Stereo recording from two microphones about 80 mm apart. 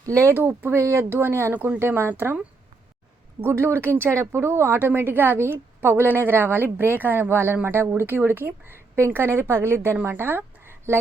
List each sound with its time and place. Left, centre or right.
0.0 s speech: right
0.3 s speech: right
1.5 s a woman's voice: centre
3.4 s a woman's voice: right